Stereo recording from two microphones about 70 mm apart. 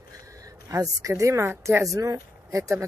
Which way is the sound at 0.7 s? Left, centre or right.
Right.